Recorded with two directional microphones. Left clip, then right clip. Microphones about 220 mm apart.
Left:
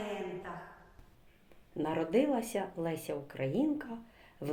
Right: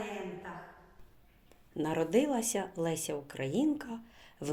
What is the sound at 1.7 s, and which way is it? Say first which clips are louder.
Speech: right 1 dB; 35° right (ahead or behind).